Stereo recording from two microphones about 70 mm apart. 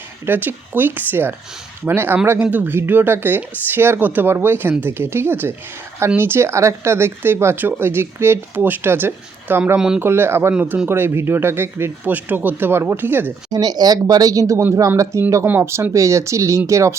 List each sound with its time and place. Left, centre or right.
0.3 s speech: right
9.7 s speech: centre
10.0 s speech: right
13.5 s speech: right